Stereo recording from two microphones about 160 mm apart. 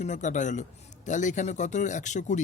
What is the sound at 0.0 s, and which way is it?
Speech, 50° left (ahead or behind).